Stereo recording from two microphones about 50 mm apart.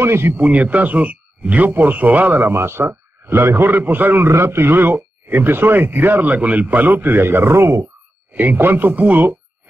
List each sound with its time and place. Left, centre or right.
0.0 s a man's voice: right
0.4 s speech: right
1.6 s speech: right
2.5 s a man's voice: right
4.3 s speech: right
8.3 s speech: right